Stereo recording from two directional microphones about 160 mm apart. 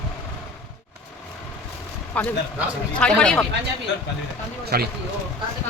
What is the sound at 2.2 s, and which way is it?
A woman's voice, 10° left (ahead or behind).